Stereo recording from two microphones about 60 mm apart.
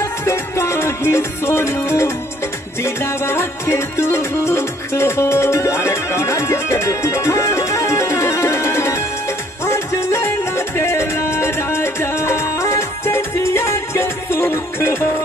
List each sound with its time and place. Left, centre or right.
0.0 s music: left
10.5 s music: left